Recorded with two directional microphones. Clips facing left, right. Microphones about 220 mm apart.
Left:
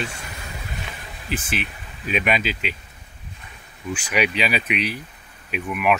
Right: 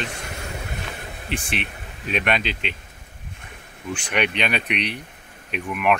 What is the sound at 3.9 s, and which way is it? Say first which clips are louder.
Speech: left 1 dB; 5° left (ahead or behind).